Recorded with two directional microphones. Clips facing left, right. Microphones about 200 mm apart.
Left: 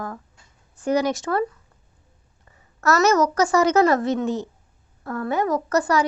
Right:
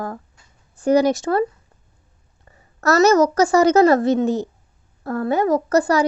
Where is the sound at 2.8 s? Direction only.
35° right (ahead or behind).